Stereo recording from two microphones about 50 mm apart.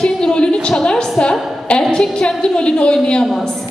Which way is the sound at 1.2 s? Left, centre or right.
Centre.